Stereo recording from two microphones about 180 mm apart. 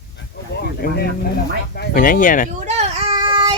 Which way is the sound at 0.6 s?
60° left (ahead or behind).